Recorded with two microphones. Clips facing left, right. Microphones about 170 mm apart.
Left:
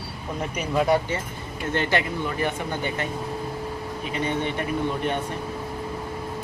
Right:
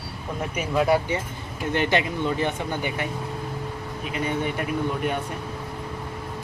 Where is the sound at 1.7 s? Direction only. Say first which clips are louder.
Right 1 dB; 15° right (ahead or behind).